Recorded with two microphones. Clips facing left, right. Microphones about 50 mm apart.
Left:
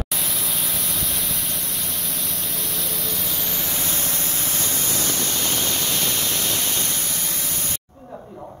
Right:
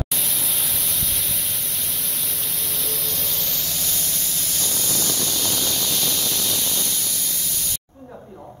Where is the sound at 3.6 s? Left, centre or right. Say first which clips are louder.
Left 3 dB; left.